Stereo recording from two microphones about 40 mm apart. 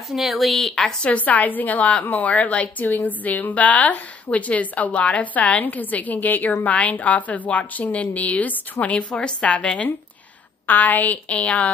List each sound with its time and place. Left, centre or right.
0.1 s a woman's voice: centre
1.0 s a woman's voice: left
8.9 s a woman's voice: left
10.7 s a woman's voice: left